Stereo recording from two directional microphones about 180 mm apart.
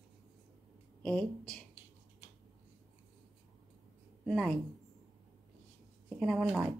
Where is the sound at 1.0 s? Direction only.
5° left (ahead or behind).